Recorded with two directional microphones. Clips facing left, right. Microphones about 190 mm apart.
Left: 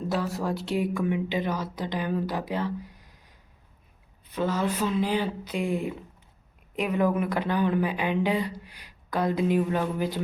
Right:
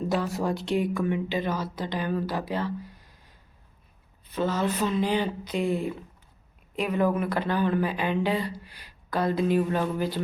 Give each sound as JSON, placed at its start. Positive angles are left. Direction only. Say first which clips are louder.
{"t": 0.1, "sound": "speech", "louder": "even", "side_deg": 0}